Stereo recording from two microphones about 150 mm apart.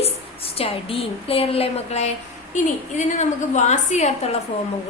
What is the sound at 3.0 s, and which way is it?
A woman's voice, 55° left (ahead or behind).